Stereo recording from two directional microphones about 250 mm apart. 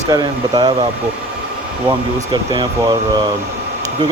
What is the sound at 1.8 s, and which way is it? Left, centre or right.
Speech, centre.